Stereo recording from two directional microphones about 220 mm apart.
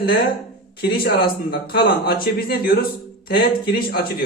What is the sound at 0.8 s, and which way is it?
A man's voice, 45° left (ahead or behind).